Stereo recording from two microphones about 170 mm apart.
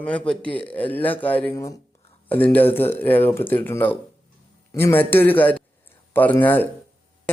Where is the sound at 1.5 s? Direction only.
20° left (ahead or behind).